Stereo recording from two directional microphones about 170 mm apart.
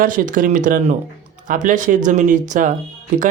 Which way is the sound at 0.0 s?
55° right (ahead or behind).